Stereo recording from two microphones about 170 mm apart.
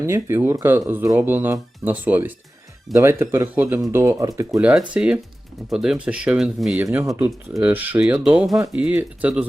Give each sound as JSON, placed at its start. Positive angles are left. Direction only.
{"t": 0.0, "sound": "speech", "side_deg": -15}
{"t": 4.5, "sound": "speech", "side_deg": -5}
{"t": 6.8, "sound": "speech", "side_deg": -15}